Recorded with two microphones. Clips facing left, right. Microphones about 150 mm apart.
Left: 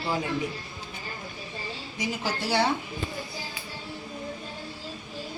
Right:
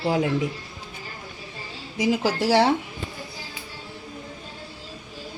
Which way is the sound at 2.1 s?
90° right.